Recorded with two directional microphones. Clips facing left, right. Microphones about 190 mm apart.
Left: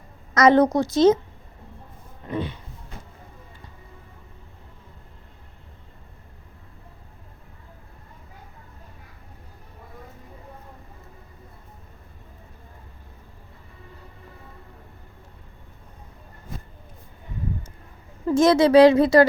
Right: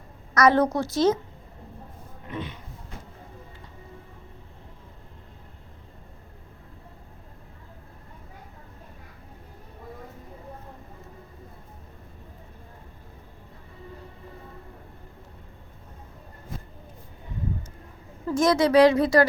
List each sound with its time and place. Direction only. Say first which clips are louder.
0.3 s a woman's voice: left 4 dB; 20° left (ahead or behind)
2.2 s speech: left 6 dB; 35° left (ahead or behind)
18.3 s a woman's voice: left 4 dB; 25° left (ahead or behind)